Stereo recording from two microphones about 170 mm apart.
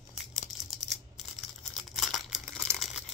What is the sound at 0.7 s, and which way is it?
Crumpling, centre (ahead or behind).